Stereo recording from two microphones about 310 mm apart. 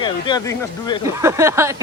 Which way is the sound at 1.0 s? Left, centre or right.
Centre.